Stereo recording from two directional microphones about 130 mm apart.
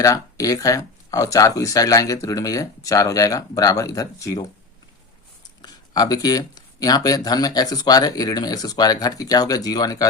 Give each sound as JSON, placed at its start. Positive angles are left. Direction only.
{"t": 0.0, "sound": "speech", "side_deg": 25}
{"t": 5.6, "sound": "speech", "side_deg": 30}